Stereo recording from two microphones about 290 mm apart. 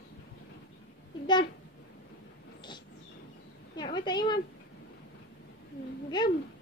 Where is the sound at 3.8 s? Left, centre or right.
Centre.